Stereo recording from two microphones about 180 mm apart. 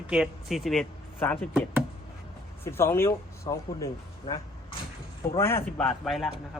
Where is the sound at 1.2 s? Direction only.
10° left (ahead or behind).